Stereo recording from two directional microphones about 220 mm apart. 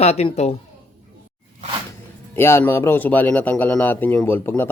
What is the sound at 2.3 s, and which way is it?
Speech, 10° left (ahead or behind).